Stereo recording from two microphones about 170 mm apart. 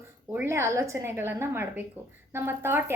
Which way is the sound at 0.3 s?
15° right (ahead or behind).